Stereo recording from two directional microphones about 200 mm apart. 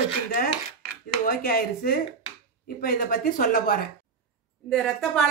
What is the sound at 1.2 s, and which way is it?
Speech, 45° left (ahead or behind).